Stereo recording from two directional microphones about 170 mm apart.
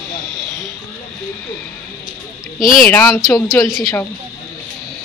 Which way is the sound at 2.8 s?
10° left (ahead or behind).